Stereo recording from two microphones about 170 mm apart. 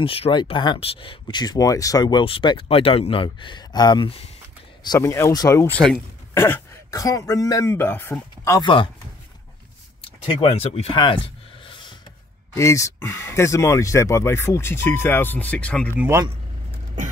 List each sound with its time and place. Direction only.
0.0 s speech: 30° left (ahead or behind)
4.8 s speech: 20° left (ahead or behind)
8.5 s speech: 30° left (ahead or behind)
10.0 s speech: 35° left (ahead or behind)
12.5 s speech: 15° left (ahead or behind)
16.0 s speech: 15° right (ahead or behind)